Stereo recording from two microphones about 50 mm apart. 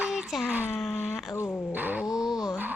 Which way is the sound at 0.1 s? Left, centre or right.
Centre.